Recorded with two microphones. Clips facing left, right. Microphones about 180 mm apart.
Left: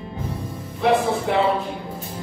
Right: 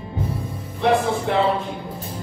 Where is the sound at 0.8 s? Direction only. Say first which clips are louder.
Even; centre (ahead or behind).